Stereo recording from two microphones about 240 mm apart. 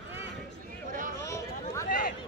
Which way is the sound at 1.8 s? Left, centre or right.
Left.